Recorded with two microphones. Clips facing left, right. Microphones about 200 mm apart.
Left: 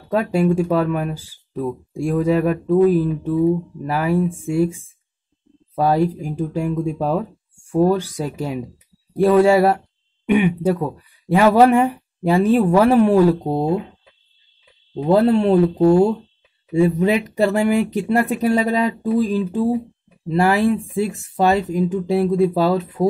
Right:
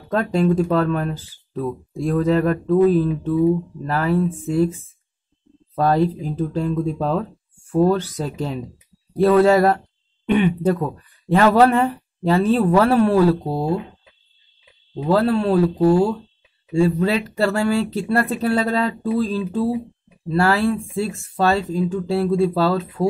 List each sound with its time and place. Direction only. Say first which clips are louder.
0.1 s speech: left 1 dB; 10° left (ahead or behind)
15.0 s speech: left 3 dB; 20° left (ahead or behind)